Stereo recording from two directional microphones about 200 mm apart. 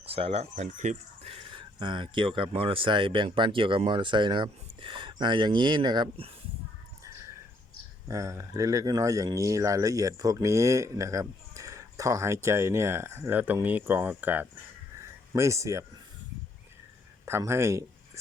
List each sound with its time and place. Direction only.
0.0 s speech: 30° right (ahead or behind)
8.0 s speech: 15° right (ahead or behind)
17.2 s speech: 10° right (ahead or behind)